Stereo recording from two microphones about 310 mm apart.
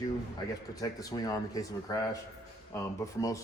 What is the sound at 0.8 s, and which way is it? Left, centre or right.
Speech, centre.